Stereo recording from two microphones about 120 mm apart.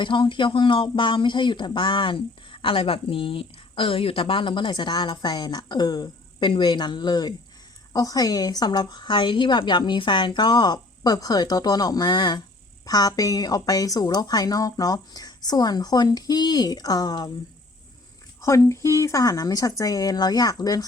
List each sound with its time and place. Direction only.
0.0 s a woman's voice: 45° left (ahead or behind)
18.4 s a woman's voice: 25° left (ahead or behind)